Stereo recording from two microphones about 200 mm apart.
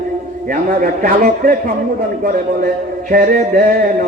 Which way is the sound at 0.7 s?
45° right (ahead or behind).